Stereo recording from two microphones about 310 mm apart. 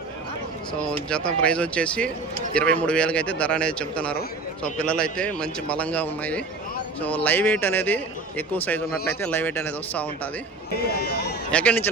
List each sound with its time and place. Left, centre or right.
1.1 s a man's voice: centre
10.8 s speech: left
11.5 s a man's voice: centre